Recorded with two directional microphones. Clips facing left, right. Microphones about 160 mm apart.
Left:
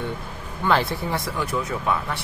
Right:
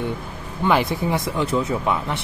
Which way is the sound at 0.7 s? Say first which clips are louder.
Right 2 dB; 15° right (ahead or behind).